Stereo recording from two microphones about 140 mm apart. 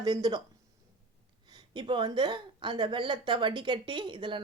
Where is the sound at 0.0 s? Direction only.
25° right (ahead or behind).